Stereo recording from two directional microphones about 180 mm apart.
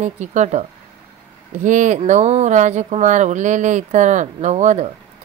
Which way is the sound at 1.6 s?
40° right (ahead or behind).